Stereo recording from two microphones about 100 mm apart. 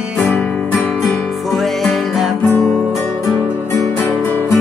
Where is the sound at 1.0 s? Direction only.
Centre (ahead or behind).